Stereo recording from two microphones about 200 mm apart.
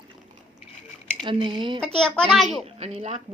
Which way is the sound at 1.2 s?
25° right (ahead or behind).